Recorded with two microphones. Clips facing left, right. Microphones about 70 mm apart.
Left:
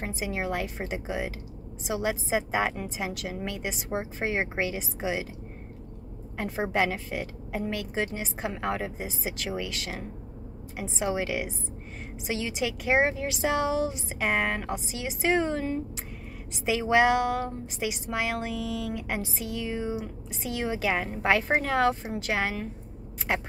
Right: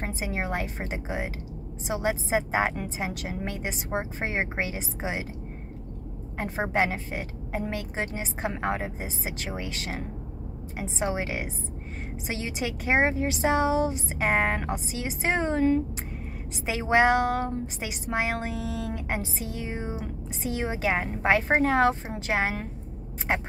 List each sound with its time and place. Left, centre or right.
0.0 s speech: right
6.3 s speech: right